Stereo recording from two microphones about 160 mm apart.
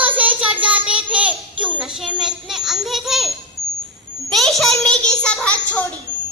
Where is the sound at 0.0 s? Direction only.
10° right (ahead or behind); by 5.8 s 5° left (ahead or behind).